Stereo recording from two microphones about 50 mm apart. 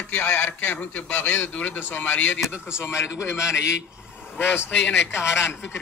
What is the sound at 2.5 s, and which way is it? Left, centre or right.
A man's voice, left.